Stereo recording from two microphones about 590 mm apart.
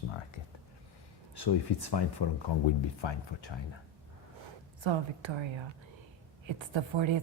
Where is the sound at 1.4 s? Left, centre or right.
Left.